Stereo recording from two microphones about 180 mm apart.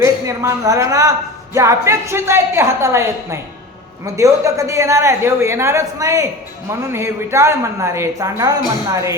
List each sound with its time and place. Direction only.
0.0 s a woman's voice: 15° right (ahead or behind)